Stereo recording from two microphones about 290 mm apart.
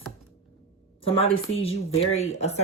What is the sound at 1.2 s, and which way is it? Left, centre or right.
Speech, centre.